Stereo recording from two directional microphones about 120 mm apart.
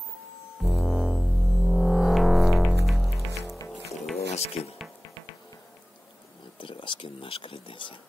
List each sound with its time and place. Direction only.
0.6 s music: centre (ahead or behind)
4.3 s music: 60° left (ahead or behind)
6.6 s a sound: 45° left (ahead or behind)